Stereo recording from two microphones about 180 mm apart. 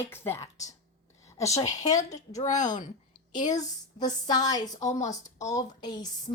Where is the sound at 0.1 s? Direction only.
15° left (ahead or behind).